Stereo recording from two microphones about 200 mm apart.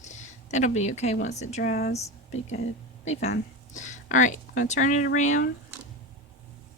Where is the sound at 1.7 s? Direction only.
50° left (ahead or behind).